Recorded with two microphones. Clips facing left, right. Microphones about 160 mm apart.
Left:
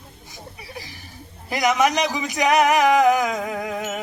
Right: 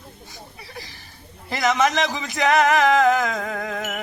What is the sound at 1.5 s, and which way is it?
Speech, 15° left (ahead or behind).